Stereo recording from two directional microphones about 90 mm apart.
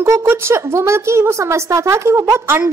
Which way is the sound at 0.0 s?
35° right (ahead or behind).